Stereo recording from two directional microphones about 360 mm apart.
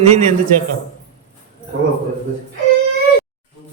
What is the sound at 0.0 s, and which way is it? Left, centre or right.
Speech, centre.